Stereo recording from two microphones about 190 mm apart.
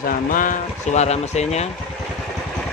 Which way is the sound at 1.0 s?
35° left (ahead or behind).